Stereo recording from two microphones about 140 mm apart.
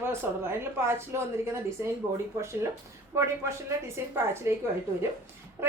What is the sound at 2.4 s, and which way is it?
A woman's voice, 20° right (ahead or behind).